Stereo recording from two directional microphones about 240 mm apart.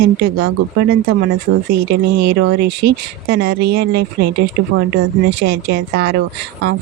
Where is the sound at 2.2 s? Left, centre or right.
Right.